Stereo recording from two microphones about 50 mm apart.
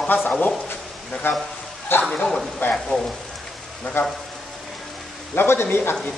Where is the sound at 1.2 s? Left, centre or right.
Left.